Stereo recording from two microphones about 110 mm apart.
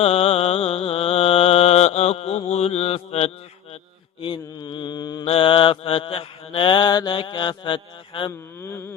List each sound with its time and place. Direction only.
0.0 s mantra: 65° left (ahead or behind)
4.2 s mantra: 45° left (ahead or behind)
5.2 s mantra: 60° left (ahead or behind)
8.6 s a sound: 20° left (ahead or behind)